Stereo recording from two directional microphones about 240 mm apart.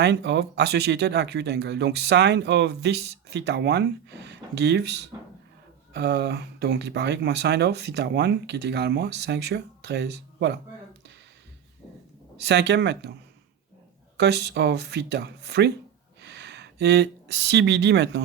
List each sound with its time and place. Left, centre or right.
0.0 s speech: right
12.4 s speech: right
14.2 s speech: right